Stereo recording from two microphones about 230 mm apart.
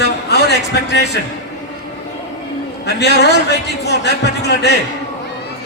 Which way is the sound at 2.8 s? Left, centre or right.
Left.